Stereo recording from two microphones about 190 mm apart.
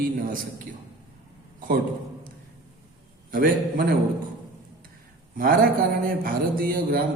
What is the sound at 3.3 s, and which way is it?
Speech, 50° right (ahead or behind).